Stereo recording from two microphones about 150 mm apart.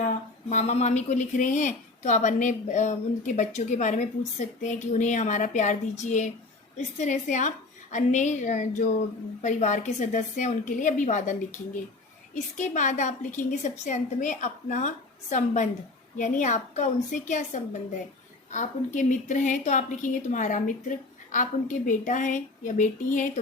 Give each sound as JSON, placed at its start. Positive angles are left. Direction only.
{"t": 0.5, "sound": "a woman's voice", "side_deg": 50}